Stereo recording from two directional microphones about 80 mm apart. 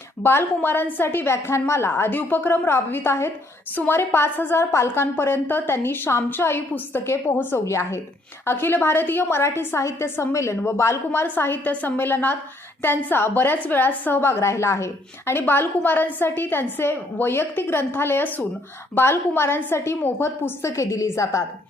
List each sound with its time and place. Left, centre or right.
0.2 s a woman's voice: left